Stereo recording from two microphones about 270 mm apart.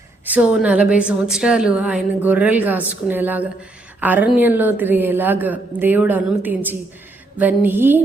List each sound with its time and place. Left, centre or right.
0.3 s a woman's voice: centre